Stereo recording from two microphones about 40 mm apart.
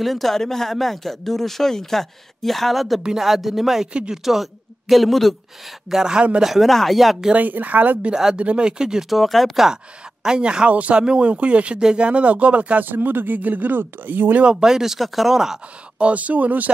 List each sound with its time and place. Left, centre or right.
0.0 s speech: centre
5.9 s speech: centre
7.3 s speech: right
8.1 s speech: centre
8.4 s speech: right
9.1 s speech: centre
10.2 s speech: centre
10.7 s speech: right
11.0 s speech: right
12.8 s speech: right
14.4 s speech: centre
16.0 s speech: right